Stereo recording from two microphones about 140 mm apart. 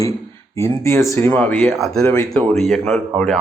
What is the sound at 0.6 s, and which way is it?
A man's voice, 20° left (ahead or behind).